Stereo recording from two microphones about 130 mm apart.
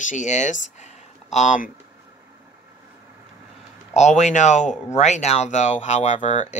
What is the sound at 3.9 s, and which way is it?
Speech, 60° left (ahead or behind).